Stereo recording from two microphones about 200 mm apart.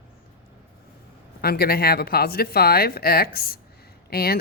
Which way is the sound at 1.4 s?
50° left (ahead or behind).